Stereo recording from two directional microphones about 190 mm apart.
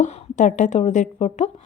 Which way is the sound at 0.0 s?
40° left (ahead or behind).